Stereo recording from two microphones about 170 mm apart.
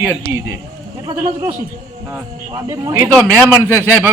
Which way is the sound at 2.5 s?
25° right (ahead or behind).